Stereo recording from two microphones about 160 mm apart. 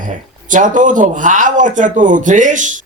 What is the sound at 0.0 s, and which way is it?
Speech, 55° right (ahead or behind).